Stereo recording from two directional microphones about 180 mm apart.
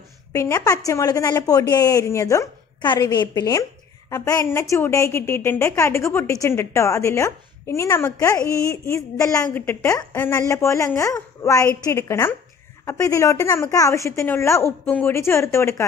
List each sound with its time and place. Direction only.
0.3 s speech: 15° left (ahead or behind)